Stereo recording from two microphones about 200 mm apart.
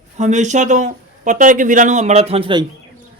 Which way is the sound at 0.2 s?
35° right (ahead or behind).